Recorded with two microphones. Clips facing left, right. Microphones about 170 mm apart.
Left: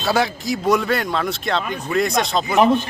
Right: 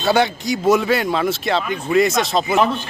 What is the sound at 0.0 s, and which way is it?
Speech, centre (ahead or behind).